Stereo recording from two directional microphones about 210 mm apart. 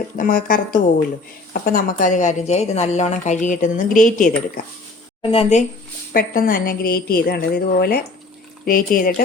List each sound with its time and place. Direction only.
0.2 s a woman's voice: 40° left (ahead or behind)
5.2 s speech: 25° left (ahead or behind)
6.1 s a woman's voice: 40° left (ahead or behind)